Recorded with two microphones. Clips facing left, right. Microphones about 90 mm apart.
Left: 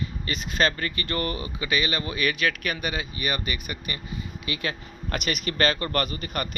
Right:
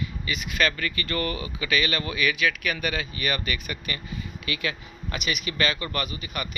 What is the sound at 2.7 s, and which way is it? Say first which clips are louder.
Speech: right 1 dB; 20° left (ahead or behind).